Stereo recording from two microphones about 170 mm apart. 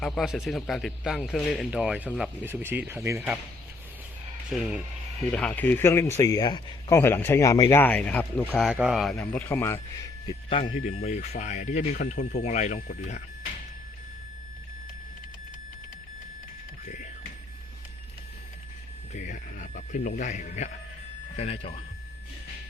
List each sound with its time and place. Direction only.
0.0 s a man's voice: centre (ahead or behind); by 3.2 s 15° right (ahead or behind)
4.4 s speech: centre (ahead or behind)
9.1 s speech: 10° left (ahead or behind); by 10.7 s 25° left (ahead or behind)
10.7 s speech: 45° left (ahead or behind)
16.8 s music: 45° left (ahead or behind)
19.1 s speech: 50° left (ahead or behind)